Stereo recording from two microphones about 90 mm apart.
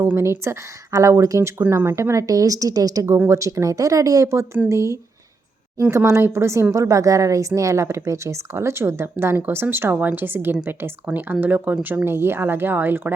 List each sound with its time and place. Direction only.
0.0 s a woman's voice: 25° right (ahead or behind)